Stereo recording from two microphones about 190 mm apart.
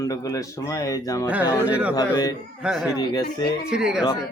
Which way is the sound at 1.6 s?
5° right (ahead or behind).